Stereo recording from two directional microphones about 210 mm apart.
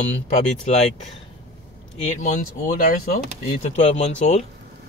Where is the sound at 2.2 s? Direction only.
35° left (ahead or behind).